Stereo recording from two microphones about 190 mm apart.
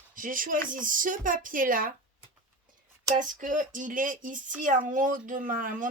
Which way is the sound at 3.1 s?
45° right (ahead or behind).